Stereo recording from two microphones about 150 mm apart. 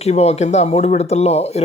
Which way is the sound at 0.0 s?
45° left (ahead or behind).